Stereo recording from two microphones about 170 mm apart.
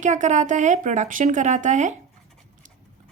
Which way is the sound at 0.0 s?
45° right (ahead or behind).